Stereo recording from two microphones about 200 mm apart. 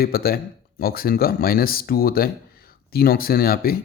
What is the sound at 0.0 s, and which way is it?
Speech, 50° left (ahead or behind).